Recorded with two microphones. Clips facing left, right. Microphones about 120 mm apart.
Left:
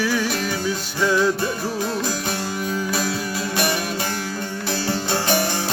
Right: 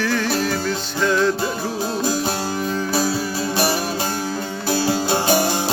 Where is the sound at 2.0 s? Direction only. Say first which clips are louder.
Right 4 dB; 30° right (ahead or behind).